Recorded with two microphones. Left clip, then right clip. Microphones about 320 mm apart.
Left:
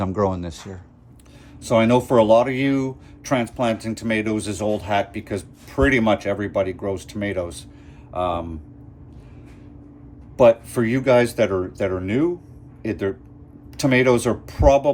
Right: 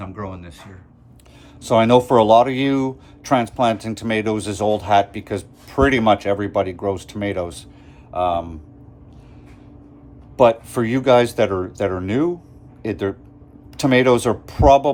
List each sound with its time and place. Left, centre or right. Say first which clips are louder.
0.0 s speech: left 10 dB; centre
1.6 s speech: right 4 dB; centre
10.3 s speech: even; centre